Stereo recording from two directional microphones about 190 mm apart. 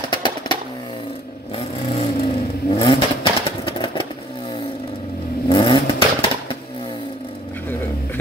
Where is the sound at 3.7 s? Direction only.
25° left (ahead or behind).